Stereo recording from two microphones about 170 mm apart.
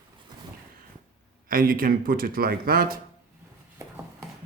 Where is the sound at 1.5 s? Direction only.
55° right (ahead or behind).